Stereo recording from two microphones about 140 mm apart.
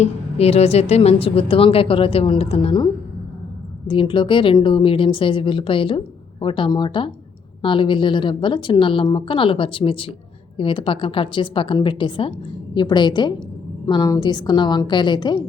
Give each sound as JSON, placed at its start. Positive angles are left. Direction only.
{"t": 0.0, "sound": "a woman's voice", "side_deg": 50}